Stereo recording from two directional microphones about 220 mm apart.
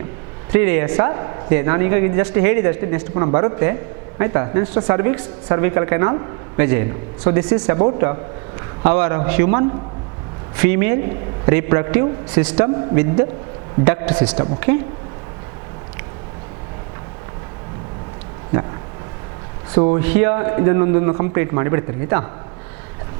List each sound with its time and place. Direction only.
0.5 s a woman's voice: 10° right (ahead or behind)
14.7 s speech: 20° right (ahead or behind)
19.7 s speech: 25° right (ahead or behind)
20.0 s a woman's voice: 10° right (ahead or behind)